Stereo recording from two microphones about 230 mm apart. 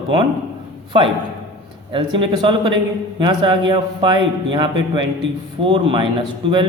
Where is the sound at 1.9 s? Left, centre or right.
Right.